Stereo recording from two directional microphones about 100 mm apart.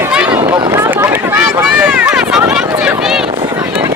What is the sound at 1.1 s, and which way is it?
Speech, 25° right (ahead or behind).